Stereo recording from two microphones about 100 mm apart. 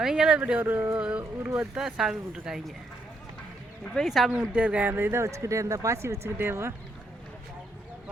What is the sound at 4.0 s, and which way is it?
Speech, centre (ahead or behind).